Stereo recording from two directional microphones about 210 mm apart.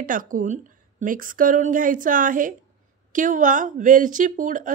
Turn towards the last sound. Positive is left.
turn(degrees=-40)  # may be behind; listen again after turning